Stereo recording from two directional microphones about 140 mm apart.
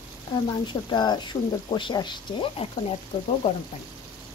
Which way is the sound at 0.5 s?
35° left (ahead or behind).